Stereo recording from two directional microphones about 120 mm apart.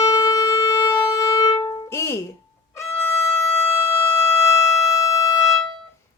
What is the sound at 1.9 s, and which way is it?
Music, 25° left (ahead or behind).